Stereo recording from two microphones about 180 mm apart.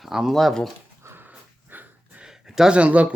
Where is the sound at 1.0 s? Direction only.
10° right (ahead or behind).